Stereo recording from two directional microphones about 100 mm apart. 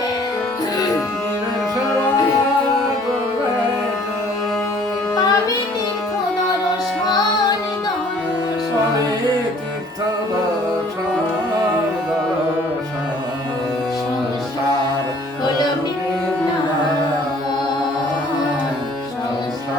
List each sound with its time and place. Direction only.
5.1 s music: 40° left (ahead or behind)